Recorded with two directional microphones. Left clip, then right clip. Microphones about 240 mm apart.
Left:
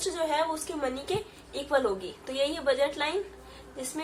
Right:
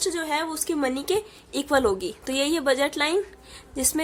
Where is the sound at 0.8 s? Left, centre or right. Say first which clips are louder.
Right 8 dB; right.